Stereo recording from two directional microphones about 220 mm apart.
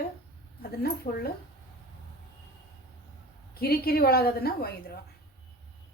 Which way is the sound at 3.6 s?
45° left (ahead or behind).